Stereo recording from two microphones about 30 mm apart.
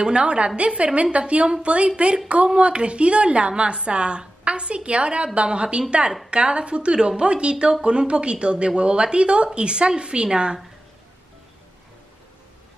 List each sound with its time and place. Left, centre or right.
0.0 s a woman's voice: right